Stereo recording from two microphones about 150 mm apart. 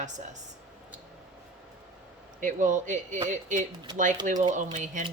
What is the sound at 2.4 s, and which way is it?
Speech, 55° right (ahead or behind).